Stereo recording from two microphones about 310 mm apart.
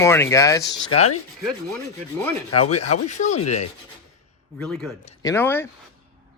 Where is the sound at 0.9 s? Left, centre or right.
Centre.